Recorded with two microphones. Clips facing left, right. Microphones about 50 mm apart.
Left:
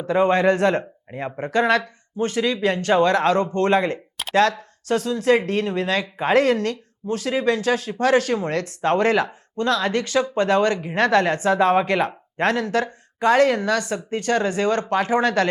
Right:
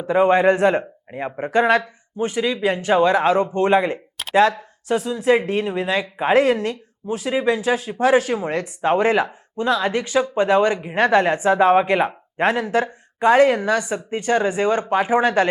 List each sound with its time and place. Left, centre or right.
0.0 s speech: centre